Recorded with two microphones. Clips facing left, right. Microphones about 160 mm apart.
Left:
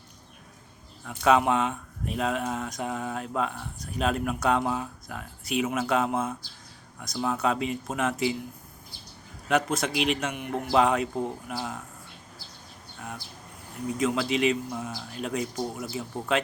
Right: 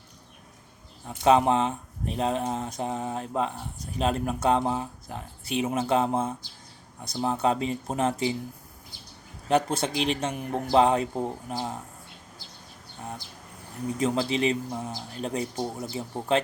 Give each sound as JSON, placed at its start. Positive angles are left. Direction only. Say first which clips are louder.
{"t": 1.0, "sound": "a man's voice", "louder": "right 2 dB", "side_deg": -30}
{"t": 9.5, "sound": "a man's voice", "louder": "right 1 dB", "side_deg": -30}
{"t": 13.0, "sound": "a man's voice", "louder": "right 1 dB", "side_deg": -30}